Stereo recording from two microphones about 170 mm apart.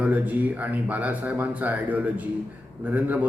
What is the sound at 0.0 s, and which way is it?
Speech, 10° right (ahead or behind).